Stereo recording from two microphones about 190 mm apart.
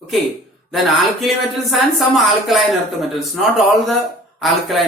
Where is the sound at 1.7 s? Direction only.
Centre (ahead or behind).